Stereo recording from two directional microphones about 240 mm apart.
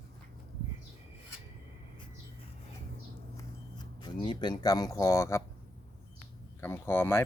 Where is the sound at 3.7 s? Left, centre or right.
Centre.